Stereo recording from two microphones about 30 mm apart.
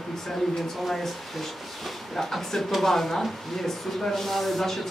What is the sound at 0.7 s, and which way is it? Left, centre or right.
Speech, centre.